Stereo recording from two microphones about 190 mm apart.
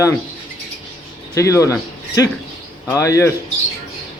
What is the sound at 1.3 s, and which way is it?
Speech, 15° left (ahead or behind).